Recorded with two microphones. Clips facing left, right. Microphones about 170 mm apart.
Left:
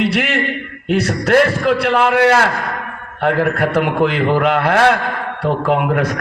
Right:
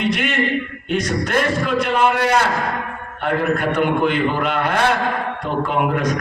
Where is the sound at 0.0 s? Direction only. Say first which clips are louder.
Left 2 dB; 85° left.